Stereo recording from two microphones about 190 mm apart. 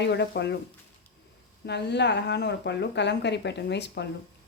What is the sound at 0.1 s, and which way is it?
Speech, 65° left (ahead or behind).